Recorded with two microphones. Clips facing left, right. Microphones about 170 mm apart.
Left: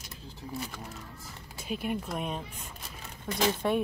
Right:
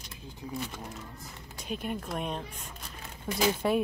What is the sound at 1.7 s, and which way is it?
Speech, 5° left (ahead or behind).